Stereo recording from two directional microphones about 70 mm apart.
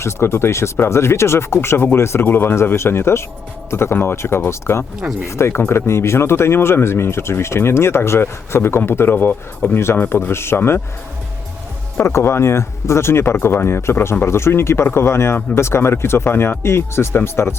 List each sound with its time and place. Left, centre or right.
0.0 s speech: left
11.9 s speech: left